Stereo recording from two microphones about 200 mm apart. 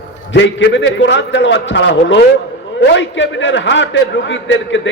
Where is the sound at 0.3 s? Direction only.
65° left (ahead or behind).